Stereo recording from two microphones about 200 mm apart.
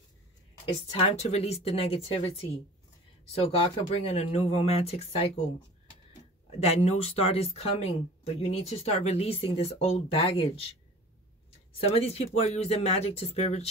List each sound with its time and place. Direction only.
0.9 s speech: 30° left (ahead or behind)
3.6 s speech: 30° left (ahead or behind)
6.6 s speech: 30° left (ahead or behind)
11.7 s speech: 30° left (ahead or behind)